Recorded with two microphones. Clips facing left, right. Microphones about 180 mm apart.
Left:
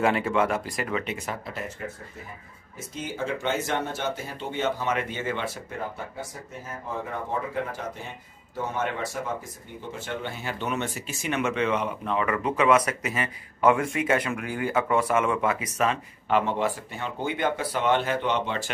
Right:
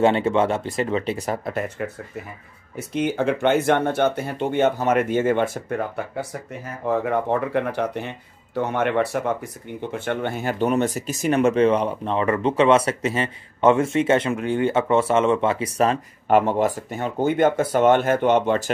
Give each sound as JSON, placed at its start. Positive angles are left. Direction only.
{"t": 0.0, "sound": "speech", "side_deg": -25}
{"t": 1.8, "sound": "speech", "side_deg": -70}
{"t": 6.6, "sound": "speech", "side_deg": -70}